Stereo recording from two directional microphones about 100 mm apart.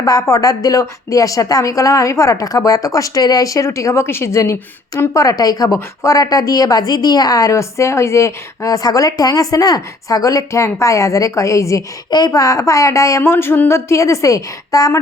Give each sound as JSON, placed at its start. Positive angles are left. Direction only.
{"t": 0.0, "sound": "a woman's voice", "side_deg": 35}